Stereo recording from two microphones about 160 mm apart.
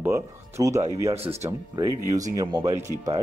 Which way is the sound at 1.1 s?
40° right (ahead or behind).